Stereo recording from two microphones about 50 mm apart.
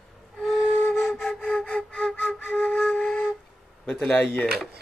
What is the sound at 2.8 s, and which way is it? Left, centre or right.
Flute, left.